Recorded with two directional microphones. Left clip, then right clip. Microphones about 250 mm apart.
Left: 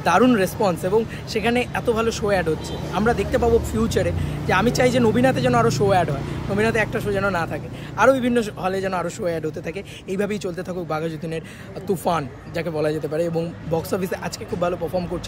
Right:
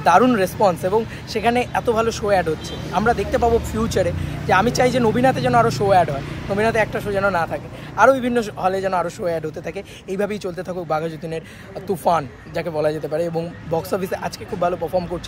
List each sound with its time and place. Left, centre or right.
0.0 s speech: centre